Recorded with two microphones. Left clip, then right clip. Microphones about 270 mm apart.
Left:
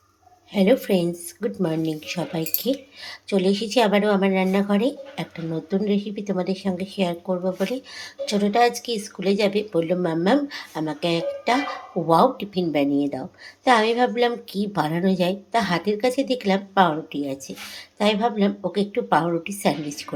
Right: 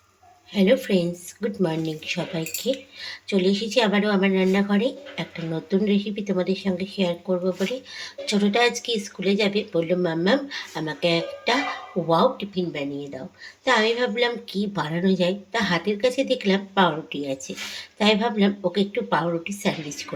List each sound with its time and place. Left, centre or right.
0.5 s speech: centre
2.7 s speech: left
3.0 s a woman's voice: centre